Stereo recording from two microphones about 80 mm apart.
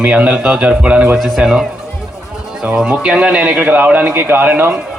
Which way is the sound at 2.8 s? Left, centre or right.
Centre.